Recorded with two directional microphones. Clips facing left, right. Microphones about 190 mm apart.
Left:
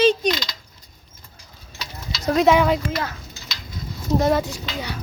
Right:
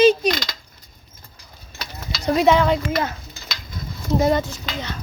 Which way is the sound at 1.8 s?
55° right (ahead or behind).